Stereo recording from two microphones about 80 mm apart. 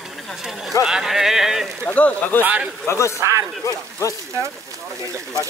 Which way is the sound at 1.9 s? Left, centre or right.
Centre.